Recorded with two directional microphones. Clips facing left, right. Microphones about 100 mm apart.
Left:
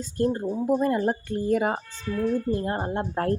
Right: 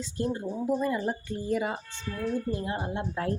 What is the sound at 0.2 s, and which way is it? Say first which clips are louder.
Speech: left 6 dB; 50° left (ahead or behind).